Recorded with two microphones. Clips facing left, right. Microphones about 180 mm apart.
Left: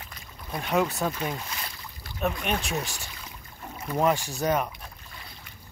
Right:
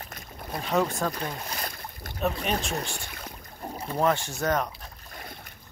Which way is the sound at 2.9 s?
55° right (ahead or behind).